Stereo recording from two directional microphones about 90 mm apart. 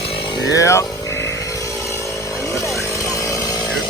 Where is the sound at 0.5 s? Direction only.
35° left (ahead or behind).